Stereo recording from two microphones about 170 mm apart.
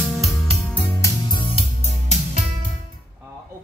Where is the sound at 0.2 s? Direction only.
Centre (ahead or behind).